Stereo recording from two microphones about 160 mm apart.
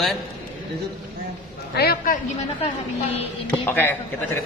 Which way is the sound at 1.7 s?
80° left.